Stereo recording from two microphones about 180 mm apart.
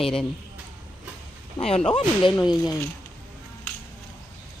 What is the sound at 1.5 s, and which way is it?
Speech, 35° left (ahead or behind).